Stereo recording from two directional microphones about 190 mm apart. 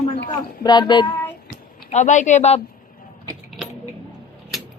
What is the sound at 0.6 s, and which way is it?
Speech, 20° left (ahead or behind).